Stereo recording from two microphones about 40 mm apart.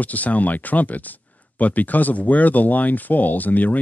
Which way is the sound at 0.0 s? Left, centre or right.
Left.